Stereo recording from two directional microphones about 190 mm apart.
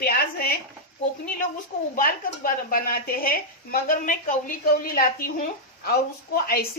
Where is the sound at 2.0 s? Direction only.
45° left (ahead or behind).